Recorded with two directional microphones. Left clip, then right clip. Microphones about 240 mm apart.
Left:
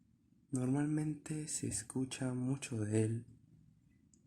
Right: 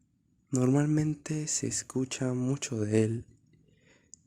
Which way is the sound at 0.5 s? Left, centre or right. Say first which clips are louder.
Right 9 dB; right.